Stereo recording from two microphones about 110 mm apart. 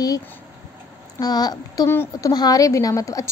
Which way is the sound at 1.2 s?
35° left (ahead or behind).